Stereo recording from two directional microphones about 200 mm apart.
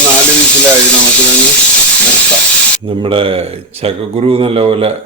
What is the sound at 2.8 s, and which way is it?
Speech, 25° right (ahead or behind).